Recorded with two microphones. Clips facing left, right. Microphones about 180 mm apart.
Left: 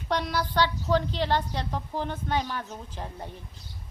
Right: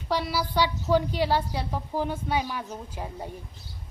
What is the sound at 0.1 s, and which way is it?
A woman's voice, 5° right (ahead or behind).